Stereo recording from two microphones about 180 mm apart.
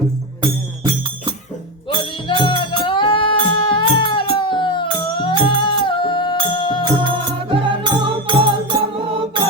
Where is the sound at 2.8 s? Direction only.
25° left (ahead or behind).